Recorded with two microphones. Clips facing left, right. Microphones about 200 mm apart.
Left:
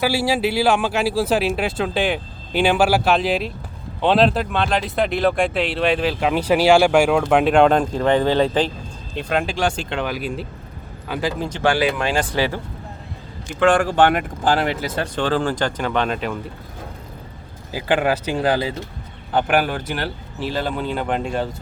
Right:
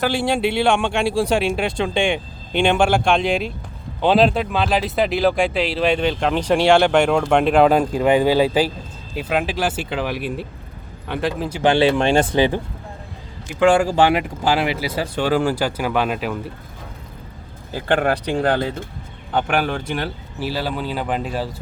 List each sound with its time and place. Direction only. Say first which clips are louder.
0.0 s speech: even; 5° left (ahead or behind)
11.6 s speech: right 4 dB; 25° right (ahead or behind)
13.6 s speech: right 1 dB; 10° right (ahead or behind)
17.7 s speech: even; 5° left (ahead or behind)